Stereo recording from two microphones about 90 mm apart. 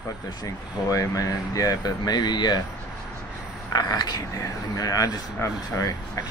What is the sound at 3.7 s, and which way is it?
Speech, 45° left (ahead or behind).